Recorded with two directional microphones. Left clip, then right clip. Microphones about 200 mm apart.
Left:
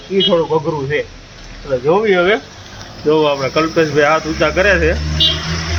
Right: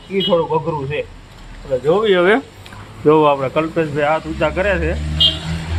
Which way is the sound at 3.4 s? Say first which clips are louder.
Left 4 dB; 15° right (ahead or behind).